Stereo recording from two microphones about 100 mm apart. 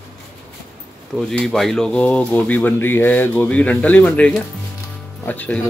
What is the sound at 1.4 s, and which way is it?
Speech, 5° left (ahead or behind).